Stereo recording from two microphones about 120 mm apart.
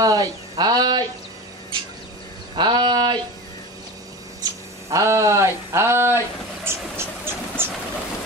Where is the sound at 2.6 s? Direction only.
40° right (ahead or behind).